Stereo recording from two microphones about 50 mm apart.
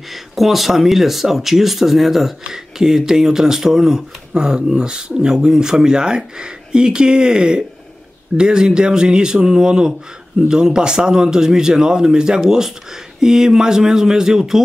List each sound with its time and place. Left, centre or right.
0.1 s speech: centre